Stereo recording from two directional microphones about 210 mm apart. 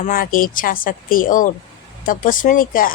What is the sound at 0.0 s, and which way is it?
A woman's voice, 40° left (ahead or behind).